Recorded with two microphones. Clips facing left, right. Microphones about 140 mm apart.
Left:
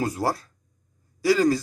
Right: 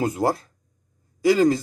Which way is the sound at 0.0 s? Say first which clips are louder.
Right 3 dB; 20° right (ahead or behind).